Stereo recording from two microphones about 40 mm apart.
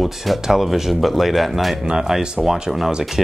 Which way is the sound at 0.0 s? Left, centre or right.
Centre.